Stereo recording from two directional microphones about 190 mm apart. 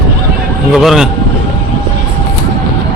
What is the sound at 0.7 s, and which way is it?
Speech, centre (ahead or behind).